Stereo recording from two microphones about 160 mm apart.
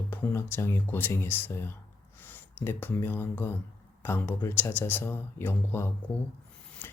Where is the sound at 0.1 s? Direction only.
15° left (ahead or behind).